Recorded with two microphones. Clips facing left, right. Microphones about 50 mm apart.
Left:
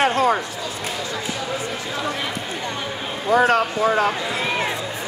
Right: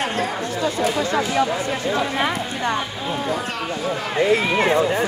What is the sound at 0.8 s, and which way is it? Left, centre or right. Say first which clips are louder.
Speech: right 8 dB; right.